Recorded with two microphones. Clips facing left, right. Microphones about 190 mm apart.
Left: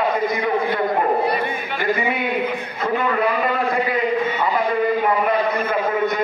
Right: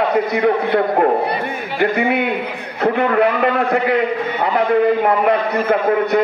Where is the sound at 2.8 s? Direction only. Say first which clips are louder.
Right 6 dB; 65° right (ahead or behind).